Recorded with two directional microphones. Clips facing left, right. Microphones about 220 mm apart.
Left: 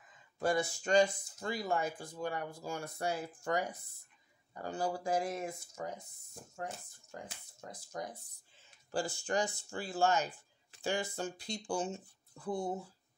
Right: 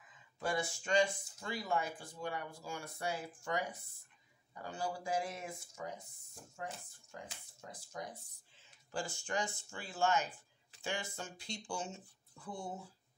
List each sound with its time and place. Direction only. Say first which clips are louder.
0.4 s speech: left 5 dB; 40° left (ahead or behind)
8.9 s speech: left 5 dB; 35° left (ahead or behind)